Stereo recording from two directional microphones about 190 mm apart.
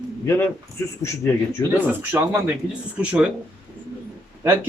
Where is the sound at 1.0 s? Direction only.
15° left (ahead or behind).